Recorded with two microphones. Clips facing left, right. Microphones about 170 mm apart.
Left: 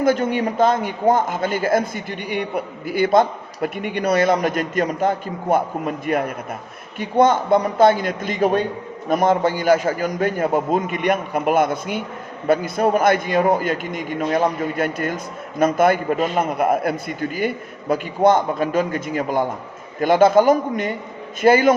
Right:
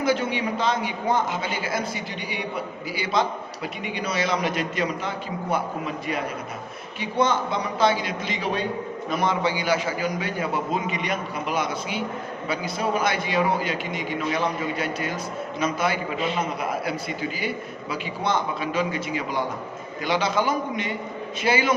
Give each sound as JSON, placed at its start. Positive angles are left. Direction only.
{"t": 0.0, "sound": "a man's voice", "side_deg": 45}